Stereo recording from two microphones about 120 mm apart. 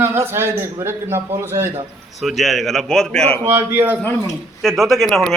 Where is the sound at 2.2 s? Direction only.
Centre (ahead or behind).